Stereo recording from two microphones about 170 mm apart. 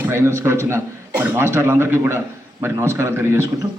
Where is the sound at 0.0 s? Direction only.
15° right (ahead or behind).